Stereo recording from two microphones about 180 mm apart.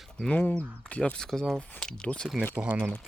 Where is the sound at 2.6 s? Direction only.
10° right (ahead or behind).